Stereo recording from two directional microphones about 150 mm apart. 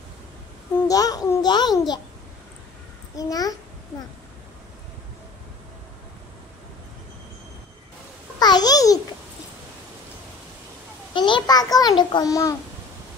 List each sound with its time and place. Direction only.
0.8 s a child's voice: 25° left (ahead or behind)
3.2 s a child's voice: 25° left (ahead or behind)
8.4 s babbling: 25° left (ahead or behind)
11.1 s a child's voice: 30° left (ahead or behind)